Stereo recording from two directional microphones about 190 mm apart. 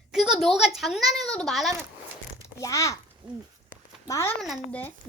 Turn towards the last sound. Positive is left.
turn(degrees=10)  # may be behind; listen again after turning